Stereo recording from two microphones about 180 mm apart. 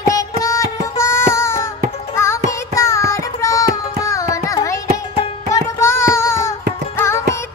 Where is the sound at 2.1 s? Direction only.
15° left (ahead or behind).